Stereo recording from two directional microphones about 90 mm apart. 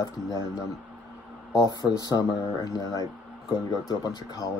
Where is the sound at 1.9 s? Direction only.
45° left (ahead or behind).